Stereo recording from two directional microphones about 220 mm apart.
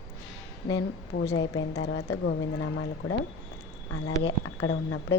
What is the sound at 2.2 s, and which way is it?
Speech, 65° left (ahead or behind).